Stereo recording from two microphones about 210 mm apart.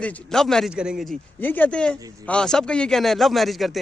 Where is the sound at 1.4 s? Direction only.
10° left (ahead or behind).